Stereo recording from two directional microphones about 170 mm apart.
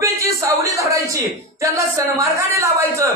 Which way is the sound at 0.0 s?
20° right (ahead or behind).